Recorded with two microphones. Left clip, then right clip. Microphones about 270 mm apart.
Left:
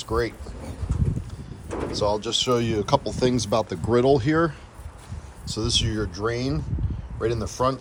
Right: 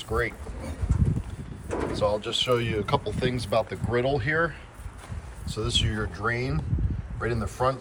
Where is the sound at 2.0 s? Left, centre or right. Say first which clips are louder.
Left 3 dB; centre.